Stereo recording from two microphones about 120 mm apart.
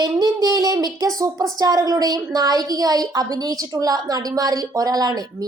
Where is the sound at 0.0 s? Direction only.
30° right (ahead or behind).